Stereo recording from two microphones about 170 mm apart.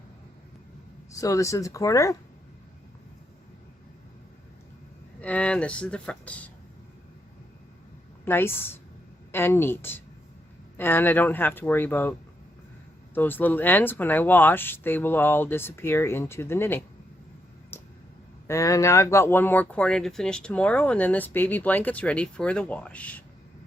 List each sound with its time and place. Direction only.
1.1 s speech: 20° left (ahead or behind)
5.2 s speech: 5° left (ahead or behind)
8.2 s speech: 15° left (ahead or behind)
13.1 s speech: 10° left (ahead or behind)
18.4 s speech: 20° left (ahead or behind)